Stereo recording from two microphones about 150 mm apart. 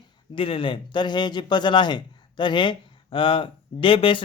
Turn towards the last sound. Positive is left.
turn(degrees=35)  # may be behind; listen again after turning